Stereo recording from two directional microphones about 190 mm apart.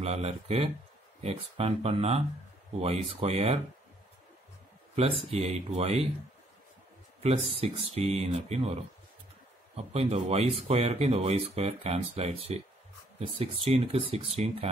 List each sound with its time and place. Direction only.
0.0 s speech: 35° right (ahead or behind)
4.9 s speech: 30° right (ahead or behind)
7.2 s speech: 30° right (ahead or behind)
9.8 s speech: 30° right (ahead or behind)